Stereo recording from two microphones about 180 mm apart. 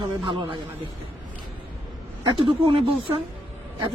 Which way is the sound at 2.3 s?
25° right (ahead or behind).